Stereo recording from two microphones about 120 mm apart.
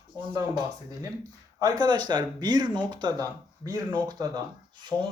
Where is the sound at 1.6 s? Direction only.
30° right (ahead or behind).